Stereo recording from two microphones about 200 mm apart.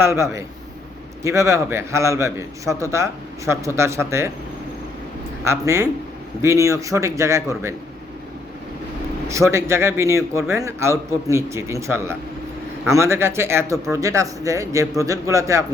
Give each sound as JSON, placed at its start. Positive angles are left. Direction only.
{"t": 0.0, "sound": "a man's voice", "side_deg": -15}
{"t": 5.5, "sound": "a man's voice", "side_deg": -15}
{"t": 9.2, "sound": "a man's voice", "side_deg": -15}